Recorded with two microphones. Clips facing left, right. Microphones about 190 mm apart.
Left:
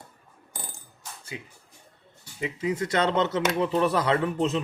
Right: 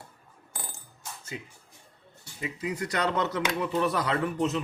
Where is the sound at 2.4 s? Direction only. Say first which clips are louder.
Left 5 dB; 25° left (ahead or behind).